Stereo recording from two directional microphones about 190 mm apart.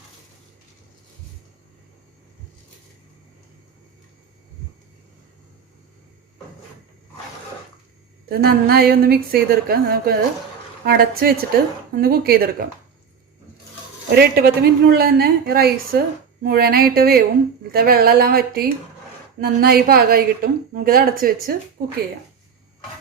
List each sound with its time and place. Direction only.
8.3 s a woman's voice: 55° right (ahead or behind)
14.1 s a woman's voice: 55° right (ahead or behind)